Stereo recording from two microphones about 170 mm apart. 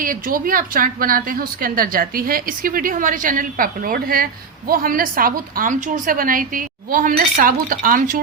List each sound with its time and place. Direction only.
0.0 s speech: 55° right (ahead or behind)